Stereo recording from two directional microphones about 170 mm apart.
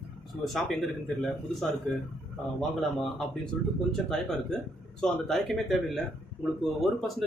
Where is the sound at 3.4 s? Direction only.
5° left (ahead or behind).